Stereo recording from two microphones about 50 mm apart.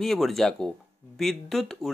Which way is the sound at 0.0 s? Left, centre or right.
Centre.